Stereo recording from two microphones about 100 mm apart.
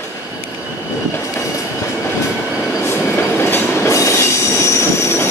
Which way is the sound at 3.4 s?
25° left (ahead or behind).